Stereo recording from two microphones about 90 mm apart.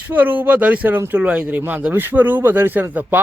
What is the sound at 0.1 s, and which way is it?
Speech, 20° right (ahead or behind).